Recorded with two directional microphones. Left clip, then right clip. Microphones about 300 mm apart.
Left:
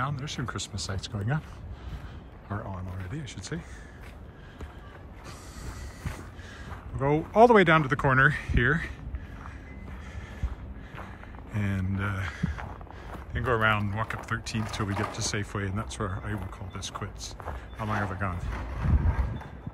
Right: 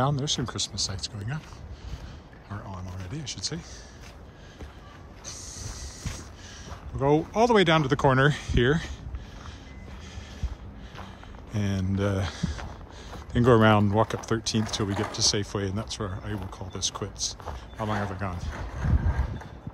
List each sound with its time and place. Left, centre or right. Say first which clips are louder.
0.0 s speech: right 6 dB; centre
2.5 s speech: left 3 dB; centre
5.2 s a sound: right 6 dB; centre
7.0 s speech: left 2 dB; centre
11.5 s speech: right 3 dB; centre
18.5 s a sound: right 1 dB; right